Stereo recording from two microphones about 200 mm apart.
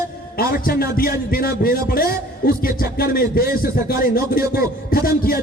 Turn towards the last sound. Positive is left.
turn(degrees=45)  # may be behind; listen again after turning